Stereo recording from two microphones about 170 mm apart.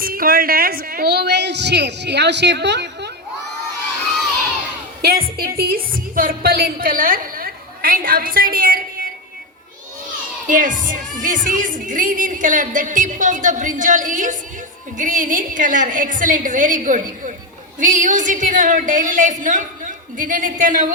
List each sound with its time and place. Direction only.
0.0 s a woman's voice: 60° right (ahead or behind); by 3.1 s 90° right
5.0 s a woman's voice: 60° right (ahead or behind)
10.4 s speech: 50° right (ahead or behind)